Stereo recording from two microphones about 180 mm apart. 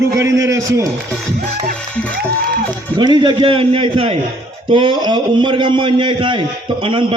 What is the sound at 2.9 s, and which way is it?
A man's voice, 25° right (ahead or behind).